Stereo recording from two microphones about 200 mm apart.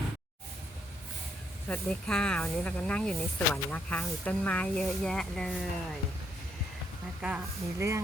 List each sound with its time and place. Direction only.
1.6 s speech: 5° left (ahead or behind)
7.2 s speech: 5° right (ahead or behind)